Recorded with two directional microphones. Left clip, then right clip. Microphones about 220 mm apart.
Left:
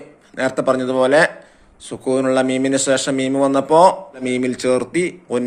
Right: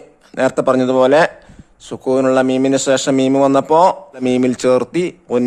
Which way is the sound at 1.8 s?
35° right (ahead or behind).